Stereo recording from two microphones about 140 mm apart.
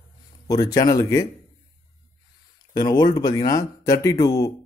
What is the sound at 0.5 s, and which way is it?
Speech, 25° left (ahead or behind).